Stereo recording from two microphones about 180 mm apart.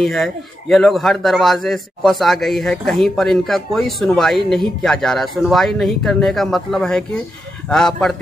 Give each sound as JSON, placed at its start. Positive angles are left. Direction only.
{"t": 0.0, "sound": "a man's voice", "side_deg": 0}